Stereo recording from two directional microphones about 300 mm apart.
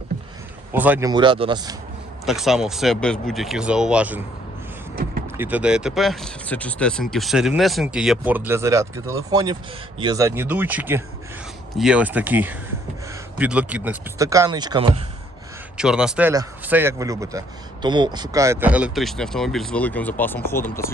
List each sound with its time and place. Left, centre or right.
0.7 s speech: centre
2.2 s speech: centre
5.4 s speech: centre
15.8 s speech: centre